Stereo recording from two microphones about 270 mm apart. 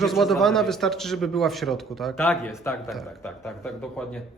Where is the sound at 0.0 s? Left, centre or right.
Centre.